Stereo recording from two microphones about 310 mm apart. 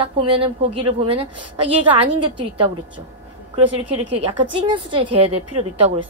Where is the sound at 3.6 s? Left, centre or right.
Right.